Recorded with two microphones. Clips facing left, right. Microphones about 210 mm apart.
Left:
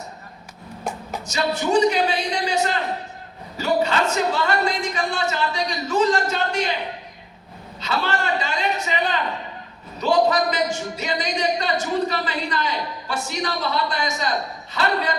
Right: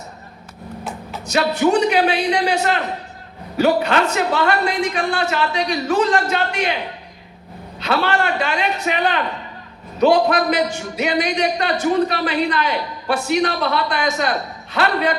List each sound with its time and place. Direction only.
1.2 s a man's voice: 65° right (ahead or behind)
7.8 s a man's voice: 60° right (ahead or behind)